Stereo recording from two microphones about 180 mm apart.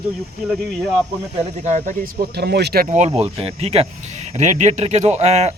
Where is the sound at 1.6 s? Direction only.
40° right (ahead or behind); by 2.8 s 65° right (ahead or behind).